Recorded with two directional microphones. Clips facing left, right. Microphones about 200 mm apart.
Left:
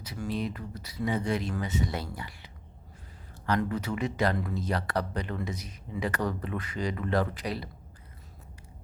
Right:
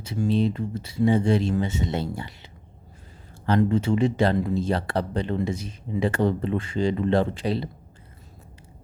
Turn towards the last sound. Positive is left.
turn(degrees=-25)  # may be behind; listen again after turning